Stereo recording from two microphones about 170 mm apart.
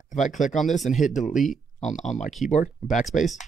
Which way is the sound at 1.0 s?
50° left (ahead or behind).